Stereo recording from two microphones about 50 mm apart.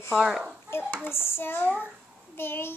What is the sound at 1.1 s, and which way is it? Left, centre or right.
Dishes, left.